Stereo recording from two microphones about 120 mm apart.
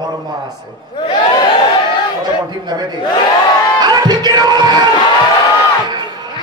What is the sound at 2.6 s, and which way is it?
Speech, 35° right (ahead or behind).